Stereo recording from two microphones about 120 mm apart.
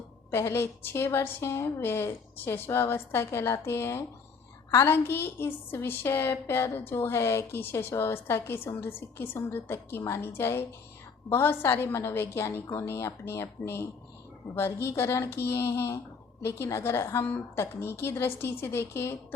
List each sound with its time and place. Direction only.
0.3 s a woman's voice: 20° left (ahead or behind)